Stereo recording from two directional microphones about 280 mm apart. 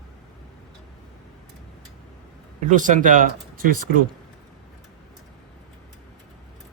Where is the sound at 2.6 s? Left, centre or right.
Right.